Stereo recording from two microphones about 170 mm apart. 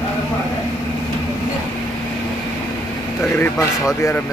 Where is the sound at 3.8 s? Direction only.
20° left (ahead or behind).